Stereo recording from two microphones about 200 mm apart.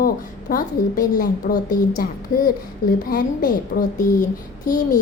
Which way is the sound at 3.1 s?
45° left (ahead or behind).